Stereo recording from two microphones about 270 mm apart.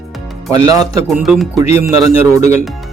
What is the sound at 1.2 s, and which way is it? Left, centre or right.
Speech, centre.